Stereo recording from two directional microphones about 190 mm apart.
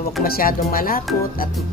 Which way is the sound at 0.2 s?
50° left (ahead or behind).